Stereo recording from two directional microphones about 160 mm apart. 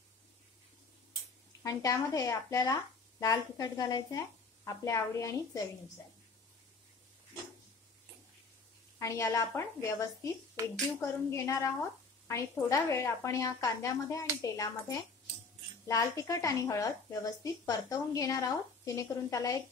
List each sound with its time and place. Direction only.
1.6 s a woman's voice: 20° left (ahead or behind)
9.0 s a woman's voice: 20° left (ahead or behind)